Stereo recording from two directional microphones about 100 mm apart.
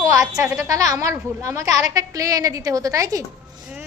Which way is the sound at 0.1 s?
35° right (ahead or behind).